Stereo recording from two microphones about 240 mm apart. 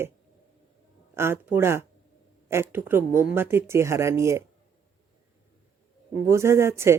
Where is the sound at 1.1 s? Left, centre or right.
Centre.